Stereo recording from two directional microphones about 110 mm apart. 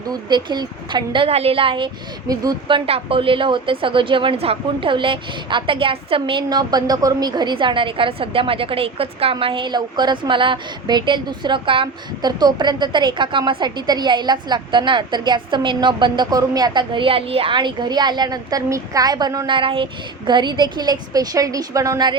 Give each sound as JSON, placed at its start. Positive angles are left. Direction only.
{"t": 0.1, "sound": "a woman's voice", "side_deg": -40}
{"t": 1.3, "sound": "a woman's voice", "side_deg": -65}
{"t": 2.2, "sound": "a woman's voice", "side_deg": -35}
{"t": 2.6, "sound": "a woman's voice", "side_deg": -55}
{"t": 19.5, "sound": "a woman's voice", "side_deg": -50}